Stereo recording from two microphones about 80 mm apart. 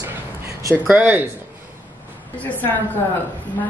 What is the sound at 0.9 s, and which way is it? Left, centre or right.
Speech, centre.